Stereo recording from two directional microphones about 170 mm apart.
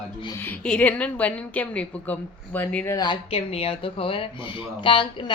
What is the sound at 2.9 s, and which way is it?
Speech, 25° left (ahead or behind).